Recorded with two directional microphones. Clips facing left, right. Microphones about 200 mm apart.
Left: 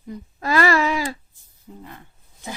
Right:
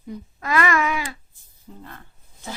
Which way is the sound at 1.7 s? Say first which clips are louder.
Left 1 dB; 10° left (ahead or behind).